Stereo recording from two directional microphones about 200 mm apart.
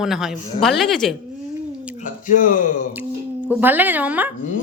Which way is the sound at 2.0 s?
40° left (ahead or behind).